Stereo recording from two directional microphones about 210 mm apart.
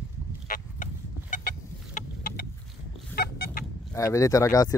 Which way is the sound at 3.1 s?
45° left (ahead or behind).